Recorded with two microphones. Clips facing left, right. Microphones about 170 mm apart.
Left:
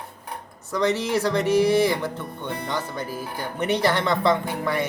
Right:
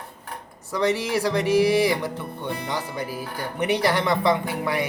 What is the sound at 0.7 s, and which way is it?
Speech, 10° right (ahead or behind).